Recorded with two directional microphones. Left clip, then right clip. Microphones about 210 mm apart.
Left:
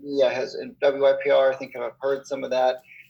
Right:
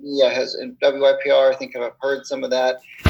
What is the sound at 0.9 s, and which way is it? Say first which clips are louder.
Speech: right 3 dB; 20° right (ahead or behind).